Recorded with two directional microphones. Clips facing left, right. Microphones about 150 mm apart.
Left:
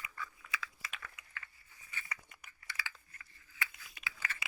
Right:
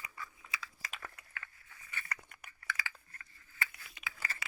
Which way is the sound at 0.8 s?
45° right (ahead or behind).